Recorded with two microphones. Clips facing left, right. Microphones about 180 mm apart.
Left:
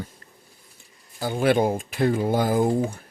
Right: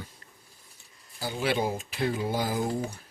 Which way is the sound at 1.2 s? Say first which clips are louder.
Left 8 dB; 55° left (ahead or behind).